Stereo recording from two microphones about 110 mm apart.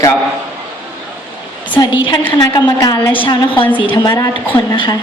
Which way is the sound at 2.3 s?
35° left (ahead or behind).